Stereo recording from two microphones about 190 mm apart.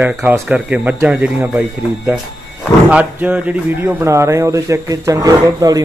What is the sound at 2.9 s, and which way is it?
Speech, 5° right (ahead or behind).